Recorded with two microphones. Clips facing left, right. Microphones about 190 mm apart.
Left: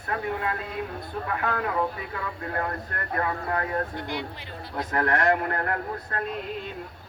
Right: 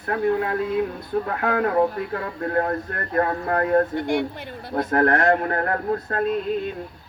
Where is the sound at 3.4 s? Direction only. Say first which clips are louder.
Right 8 dB; 55° right (ahead or behind).